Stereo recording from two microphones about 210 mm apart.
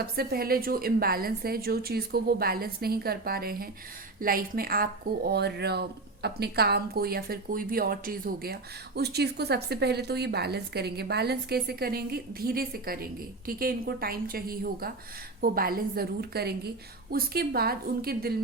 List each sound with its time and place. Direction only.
0.0 s a woman's voice: 50° right (ahead or behind)